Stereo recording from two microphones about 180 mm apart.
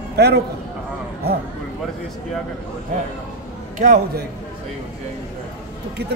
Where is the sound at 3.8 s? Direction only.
50° right (ahead or behind).